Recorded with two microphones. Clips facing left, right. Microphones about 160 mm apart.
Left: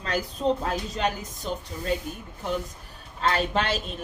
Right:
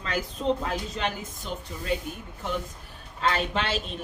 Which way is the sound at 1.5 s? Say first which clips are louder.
Left 4 dB; 35° left (ahead or behind).